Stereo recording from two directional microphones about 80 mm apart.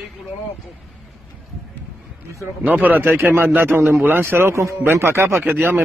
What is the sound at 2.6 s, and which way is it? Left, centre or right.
A man's voice, right.